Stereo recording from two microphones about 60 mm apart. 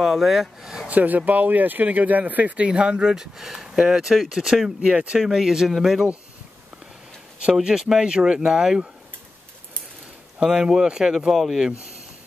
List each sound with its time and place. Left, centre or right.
0.0 s speech: centre
0.8 s speech: right; by 6.0 s centre
7.5 s speech: centre
10.4 s speech: centre